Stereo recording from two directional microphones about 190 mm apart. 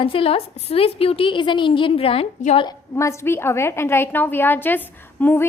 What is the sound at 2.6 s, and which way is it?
A woman's voice, 15° left (ahead or behind).